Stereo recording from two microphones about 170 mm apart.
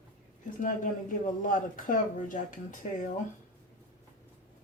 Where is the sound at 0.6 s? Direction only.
50° left (ahead or behind).